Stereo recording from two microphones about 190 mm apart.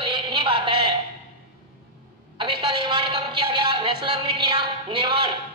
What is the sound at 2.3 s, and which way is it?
Music, 25° right (ahead or behind).